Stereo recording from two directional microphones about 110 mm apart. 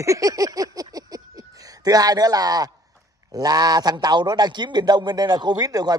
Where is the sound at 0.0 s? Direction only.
30° right (ahead or behind).